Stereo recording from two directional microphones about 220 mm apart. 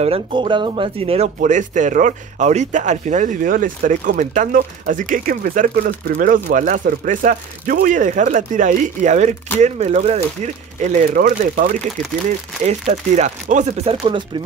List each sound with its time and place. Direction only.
0.0 s speech: 25° right (ahead or behind)